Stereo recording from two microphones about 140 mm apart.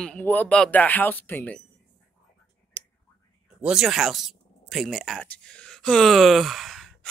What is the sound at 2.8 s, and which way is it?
Clicking, 15° right (ahead or behind).